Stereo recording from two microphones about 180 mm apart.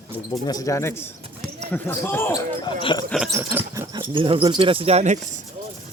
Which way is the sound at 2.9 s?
25° left (ahead or behind).